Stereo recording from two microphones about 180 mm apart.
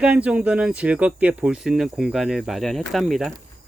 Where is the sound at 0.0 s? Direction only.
5° right (ahead or behind).